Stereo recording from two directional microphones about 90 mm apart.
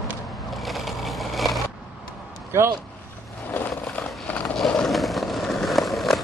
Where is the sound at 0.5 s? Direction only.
Centre (ahead or behind).